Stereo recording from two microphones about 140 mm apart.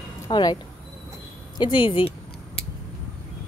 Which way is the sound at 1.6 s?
35° left (ahead or behind).